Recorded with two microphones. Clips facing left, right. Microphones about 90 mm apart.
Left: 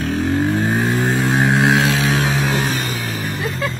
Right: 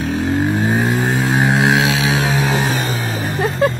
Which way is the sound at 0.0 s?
5° right (ahead or behind).